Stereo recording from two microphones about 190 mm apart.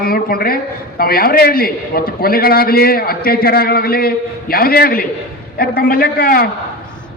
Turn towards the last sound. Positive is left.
turn(degrees=50)  # may be behind; listen again after turning